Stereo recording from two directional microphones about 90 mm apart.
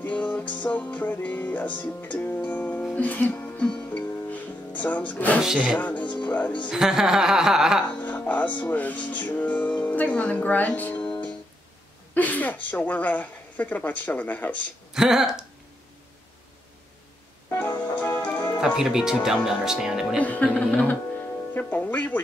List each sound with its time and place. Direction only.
0.0 s music: 15° left (ahead or behind)
5.4 s speech: 10° right (ahead or behind)
5.8 s speech: 15° left (ahead or behind)
6.7 s speech: 5° right (ahead or behind)
8.0 s speech: 15° left (ahead or behind)
11.1 s music: 15° left (ahead or behind)
12.1 s speech: 20° left (ahead or behind)
15.0 s speech: 5° right (ahead or behind)
17.5 s music: 25° left (ahead or behind)
18.6 s speech: 5° right (ahead or behind)
20.2 s speech: 15° left (ahead or behind)